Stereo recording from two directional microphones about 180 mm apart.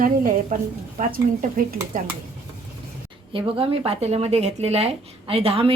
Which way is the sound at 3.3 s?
30° right (ahead or behind).